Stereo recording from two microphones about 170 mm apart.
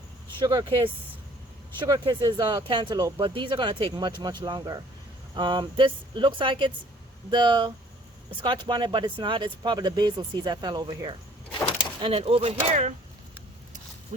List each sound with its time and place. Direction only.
0.3 s speech: 25° right (ahead or behind)